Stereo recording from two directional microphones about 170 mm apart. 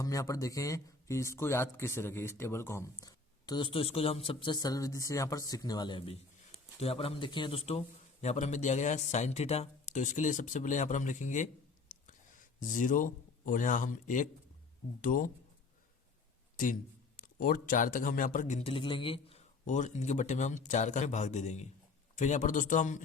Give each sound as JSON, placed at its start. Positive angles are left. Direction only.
{"t": 0.0, "sound": "speech", "side_deg": 20}
{"t": 11.9, "sound": "a sound", "side_deg": 50}
{"t": 15.0, "sound": "speech", "side_deg": 55}
{"t": 16.6, "sound": "speech", "side_deg": 55}